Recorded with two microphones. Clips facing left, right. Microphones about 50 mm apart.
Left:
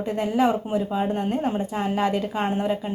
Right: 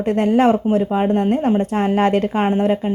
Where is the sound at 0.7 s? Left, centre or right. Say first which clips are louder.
Right 7 dB; right.